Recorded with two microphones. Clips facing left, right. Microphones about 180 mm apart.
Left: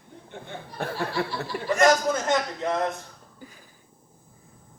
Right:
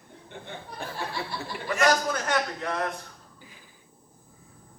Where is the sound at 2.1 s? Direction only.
25° left (ahead or behind).